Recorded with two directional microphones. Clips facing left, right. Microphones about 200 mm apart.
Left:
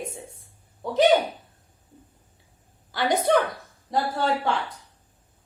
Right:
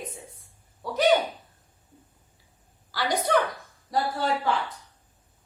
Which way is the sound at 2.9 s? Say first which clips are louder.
Left 4 dB; 25° left (ahead or behind).